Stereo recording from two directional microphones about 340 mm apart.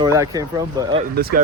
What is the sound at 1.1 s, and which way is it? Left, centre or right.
Speech, right.